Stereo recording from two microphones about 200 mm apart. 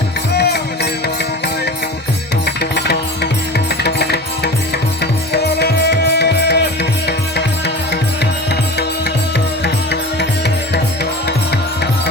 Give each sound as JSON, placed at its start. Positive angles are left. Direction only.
{"t": 0.3, "sound": "music", "side_deg": 55}
{"t": 3.8, "sound": "music", "side_deg": 55}
{"t": 5.3, "sound": "music", "side_deg": 55}
{"t": 9.6, "sound": "music", "side_deg": 55}